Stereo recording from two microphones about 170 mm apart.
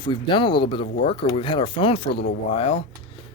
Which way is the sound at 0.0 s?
30° left (ahead or behind).